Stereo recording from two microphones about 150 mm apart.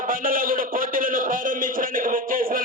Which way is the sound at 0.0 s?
65° right (ahead or behind).